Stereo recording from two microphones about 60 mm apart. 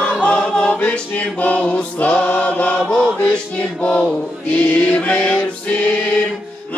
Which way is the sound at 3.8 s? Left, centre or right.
Centre.